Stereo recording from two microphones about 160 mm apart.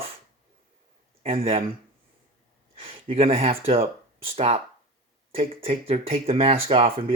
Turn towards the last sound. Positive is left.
turn(degrees=-35)  # may be behind; listen again after turning